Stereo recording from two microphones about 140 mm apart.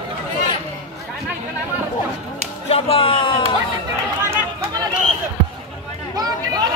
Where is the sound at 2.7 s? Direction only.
40° left (ahead or behind).